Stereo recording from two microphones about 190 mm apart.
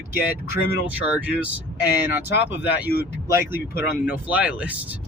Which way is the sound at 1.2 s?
5° right (ahead or behind).